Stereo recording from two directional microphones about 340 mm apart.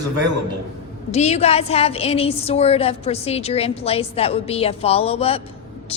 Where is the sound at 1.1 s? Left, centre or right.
Centre.